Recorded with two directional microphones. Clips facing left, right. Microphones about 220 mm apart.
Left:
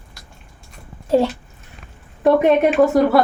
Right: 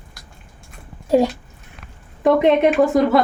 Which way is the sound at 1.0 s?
10° right (ahead or behind).